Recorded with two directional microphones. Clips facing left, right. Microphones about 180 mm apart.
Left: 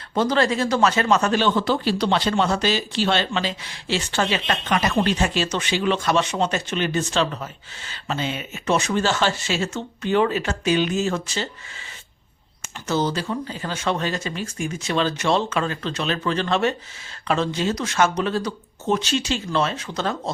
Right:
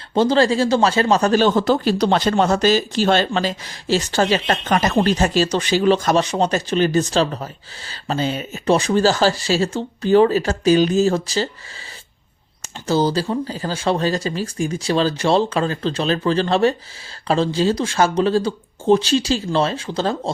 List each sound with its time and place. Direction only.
0.1 s speech: 30° right (ahead or behind)
12.9 s speech: 35° right (ahead or behind)